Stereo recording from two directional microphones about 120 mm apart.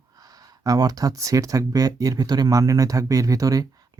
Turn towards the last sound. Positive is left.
turn(degrees=-30)  # may be behind; listen again after turning